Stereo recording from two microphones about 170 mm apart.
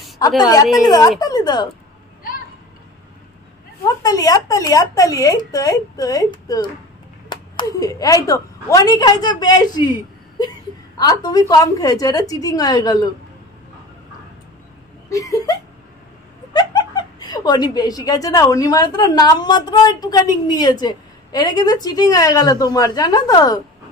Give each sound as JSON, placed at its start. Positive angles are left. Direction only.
{"t": 0.4, "sound": "a woman's voice", "side_deg": 20}
{"t": 3.8, "sound": "a woman's voice", "side_deg": 20}
{"t": 11.0, "sound": "a woman's voice", "side_deg": 25}
{"t": 15.0, "sound": "a woman's voice", "side_deg": 20}
{"t": 16.5, "sound": "chuckle", "side_deg": 25}
{"t": 17.7, "sound": "a woman's voice", "side_deg": 20}